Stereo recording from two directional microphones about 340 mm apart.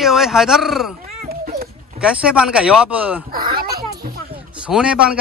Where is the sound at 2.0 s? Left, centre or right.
Centre.